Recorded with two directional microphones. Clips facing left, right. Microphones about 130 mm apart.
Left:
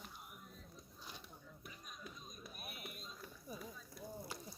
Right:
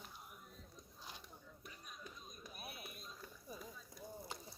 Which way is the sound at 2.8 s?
5° right (ahead or behind).